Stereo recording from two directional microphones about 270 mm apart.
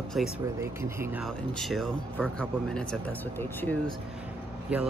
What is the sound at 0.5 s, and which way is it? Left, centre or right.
Speech, centre.